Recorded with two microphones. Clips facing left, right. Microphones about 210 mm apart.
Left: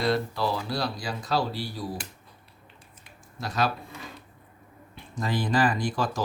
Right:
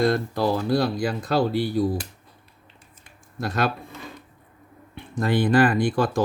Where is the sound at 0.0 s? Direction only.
50° right (ahead or behind).